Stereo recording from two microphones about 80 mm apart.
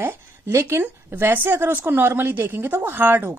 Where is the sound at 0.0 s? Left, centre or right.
Right.